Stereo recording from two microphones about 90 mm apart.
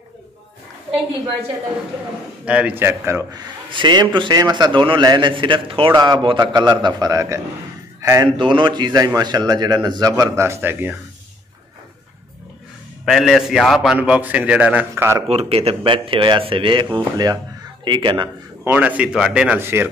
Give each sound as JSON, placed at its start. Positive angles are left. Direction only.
{"t": 2.4, "sound": "a man's voice", "side_deg": -15}
{"t": 3.7, "sound": "a man's voice", "side_deg": -60}
{"t": 5.9, "sound": "a man's voice", "side_deg": -55}
{"t": 8.4, "sound": "a man's voice", "side_deg": -65}
{"t": 10.4, "sound": "a man's voice", "side_deg": -25}
{"t": 13.0, "sound": "a man's voice", "side_deg": 0}
{"t": 13.9, "sound": "a man's voice", "side_deg": -15}
{"t": 15.5, "sound": "a man's voice", "side_deg": -80}
{"t": 18.6, "sound": "a man's voice", "side_deg": -20}
{"t": 19.6, "sound": "a man's voice", "side_deg": -25}